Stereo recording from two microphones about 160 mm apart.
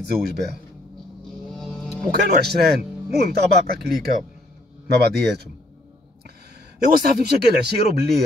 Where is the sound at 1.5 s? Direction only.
5° left (ahead or behind).